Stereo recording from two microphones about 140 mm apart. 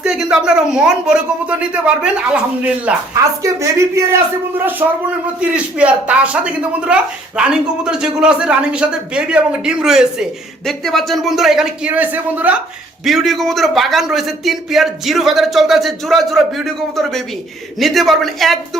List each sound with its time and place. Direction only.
0.0 s a man's voice: 5° right (ahead or behind)
3.4 s a woman's voice: 20° right (ahead or behind)
13.1 s a man's voice: centre (ahead or behind)